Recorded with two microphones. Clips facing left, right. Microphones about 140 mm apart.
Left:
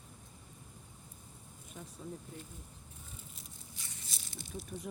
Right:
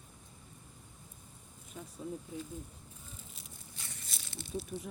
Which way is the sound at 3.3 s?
65° right (ahead or behind).